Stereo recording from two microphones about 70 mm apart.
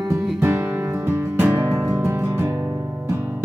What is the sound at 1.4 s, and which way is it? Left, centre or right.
Music, right.